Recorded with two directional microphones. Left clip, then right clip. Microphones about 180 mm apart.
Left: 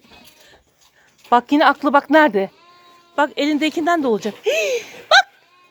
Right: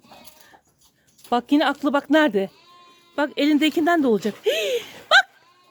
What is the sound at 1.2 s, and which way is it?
Speech, 20° right (ahead or behind).